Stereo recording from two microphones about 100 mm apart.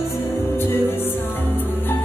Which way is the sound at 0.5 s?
20° left (ahead or behind).